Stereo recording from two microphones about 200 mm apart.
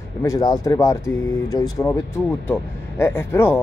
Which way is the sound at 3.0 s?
10° left (ahead or behind).